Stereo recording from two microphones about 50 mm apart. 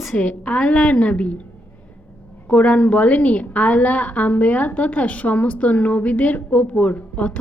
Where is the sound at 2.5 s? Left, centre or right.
Left.